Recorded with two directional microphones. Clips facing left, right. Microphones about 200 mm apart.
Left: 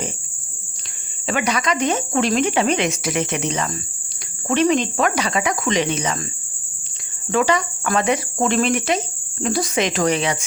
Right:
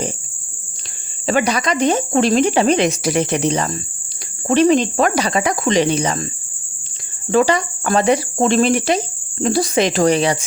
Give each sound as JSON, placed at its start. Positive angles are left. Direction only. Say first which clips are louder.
{"t": 1.3, "sound": "cricket", "louder": "right 4 dB", "side_deg": -35}
{"t": 7.3, "sound": "cricket", "louder": "right 4 dB", "side_deg": -35}